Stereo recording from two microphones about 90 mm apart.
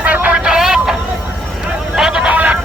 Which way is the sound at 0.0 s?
15° right (ahead or behind).